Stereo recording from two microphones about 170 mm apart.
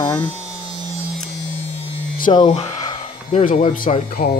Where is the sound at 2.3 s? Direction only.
25° left (ahead or behind).